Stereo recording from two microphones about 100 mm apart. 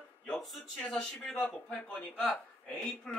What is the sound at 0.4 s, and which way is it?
A man's voice, centre (ahead or behind).